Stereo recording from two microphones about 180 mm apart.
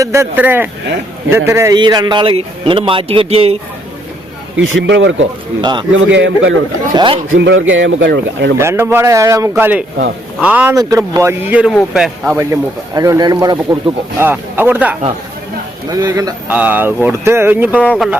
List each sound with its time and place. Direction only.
0.0 s speech: 15° right (ahead or behind); by 3.6 s 35° right (ahead or behind)
4.6 s speech: 90° right
6.9 s speech: 25° right (ahead or behind)
7.3 s speech: 90° right
8.5 s speech: 15° right (ahead or behind)
10.8 s speech: 20° right (ahead or behind); by 12.4 s centre (ahead or behind)
12.4 s speech: 15° right (ahead or behind)
14.2 s speech: 10° right (ahead or behind)